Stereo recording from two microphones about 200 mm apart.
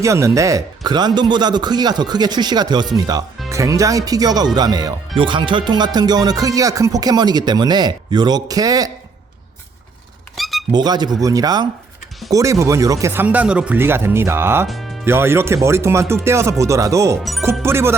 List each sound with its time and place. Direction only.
0.0 s speech: 15° right (ahead or behind)
10.3 s a sound: centre (ahead or behind)
10.7 s speech: 20° right (ahead or behind)